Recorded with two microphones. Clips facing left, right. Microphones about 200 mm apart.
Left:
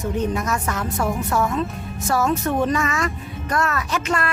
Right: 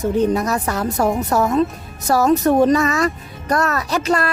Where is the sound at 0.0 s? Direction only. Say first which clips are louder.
Right 6 dB; 35° right (ahead or behind).